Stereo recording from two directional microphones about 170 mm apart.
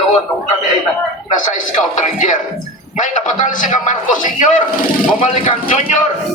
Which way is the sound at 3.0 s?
50° left (ahead or behind).